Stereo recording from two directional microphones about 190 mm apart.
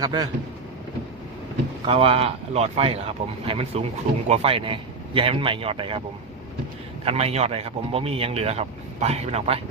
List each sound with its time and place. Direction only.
0.0 s a man's voice: 20° right (ahead or behind)
1.9 s a man's voice: 30° right (ahead or behind)
7.0 s a man's voice: 30° right (ahead or behind)